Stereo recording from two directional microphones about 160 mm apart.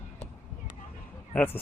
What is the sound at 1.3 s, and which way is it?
Speech, 10° left (ahead or behind).